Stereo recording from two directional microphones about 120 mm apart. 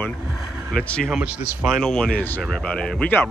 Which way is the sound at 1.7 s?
5° left (ahead or behind).